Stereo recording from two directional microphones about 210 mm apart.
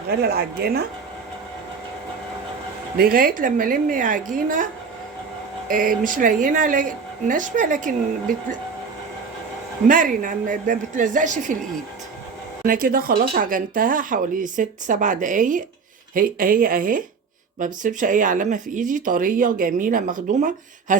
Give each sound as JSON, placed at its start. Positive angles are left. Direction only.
{"t": 0.2, "sound": "speech", "side_deg": -45}
{"t": 3.0, "sound": "speech", "side_deg": -45}
{"t": 5.6, "sound": "speech", "side_deg": -40}
{"t": 9.8, "sound": "speech", "side_deg": -40}
{"t": 12.6, "sound": "speech", "side_deg": -40}